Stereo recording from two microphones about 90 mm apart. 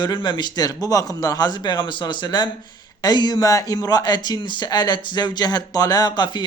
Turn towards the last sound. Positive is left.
turn(degrees=50)  # may be behind; listen again after turning